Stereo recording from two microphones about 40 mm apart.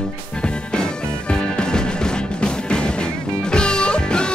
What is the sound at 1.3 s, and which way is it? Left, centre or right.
Music, left.